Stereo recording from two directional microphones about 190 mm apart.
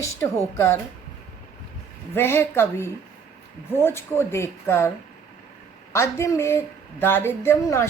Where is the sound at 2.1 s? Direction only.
10° left (ahead or behind).